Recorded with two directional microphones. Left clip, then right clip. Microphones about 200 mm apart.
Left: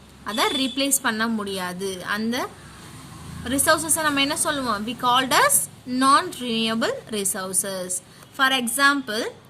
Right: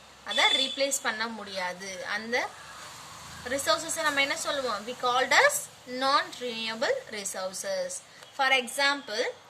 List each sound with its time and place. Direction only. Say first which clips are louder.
0.3 s a woman's voice: left 1 dB; 60° left (ahead or behind)
3.5 s a woman's voice: left 7 dB; 55° left (ahead or behind)